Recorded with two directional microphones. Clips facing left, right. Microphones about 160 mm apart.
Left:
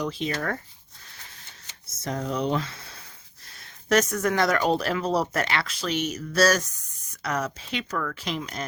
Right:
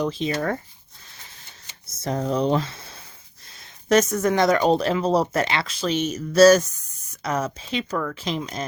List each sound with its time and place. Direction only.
0.0 s speech: 25° right (ahead or behind)
1.9 s speech: 30° right (ahead or behind)